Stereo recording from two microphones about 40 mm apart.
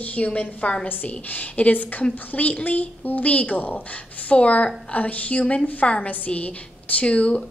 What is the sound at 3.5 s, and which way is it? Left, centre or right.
Speech, left.